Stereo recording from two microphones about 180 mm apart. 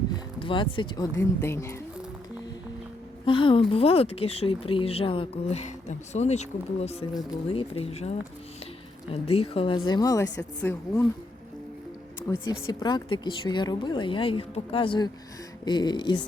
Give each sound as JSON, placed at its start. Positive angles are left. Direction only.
{"t": 0.3, "sound": "speech", "side_deg": 25}
{"t": 3.2, "sound": "speech", "side_deg": 30}
{"t": 7.1, "sound": "speech", "side_deg": 25}
{"t": 9.1, "sound": "speech", "side_deg": 35}
{"t": 10.6, "sound": "speech", "side_deg": 5}
{"t": 12.5, "sound": "speech", "side_deg": 25}